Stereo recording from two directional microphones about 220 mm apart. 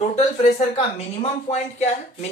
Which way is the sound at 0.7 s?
30° left (ahead or behind).